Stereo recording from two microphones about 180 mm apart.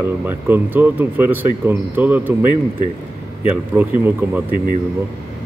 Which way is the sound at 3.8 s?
10° right (ahead or behind).